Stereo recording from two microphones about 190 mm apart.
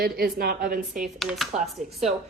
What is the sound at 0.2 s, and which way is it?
Speech, 50° right (ahead or behind).